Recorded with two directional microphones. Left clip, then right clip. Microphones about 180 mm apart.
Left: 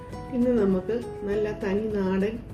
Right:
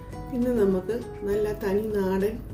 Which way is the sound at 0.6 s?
10° right (ahead or behind).